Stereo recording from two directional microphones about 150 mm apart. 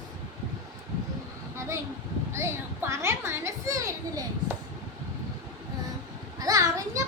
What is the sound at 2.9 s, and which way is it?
A child's voice, 20° right (ahead or behind).